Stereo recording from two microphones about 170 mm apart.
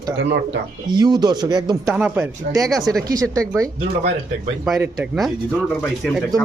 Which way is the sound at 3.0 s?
20° right (ahead or behind).